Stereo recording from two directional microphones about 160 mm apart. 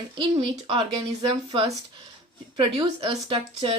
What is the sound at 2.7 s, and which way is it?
Speech, 30° right (ahead or behind).